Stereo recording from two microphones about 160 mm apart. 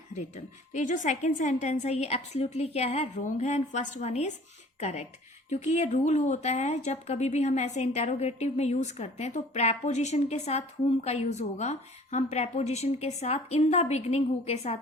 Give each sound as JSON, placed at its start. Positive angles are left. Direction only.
{"t": 0.7, "sound": "a woman's voice", "side_deg": 50}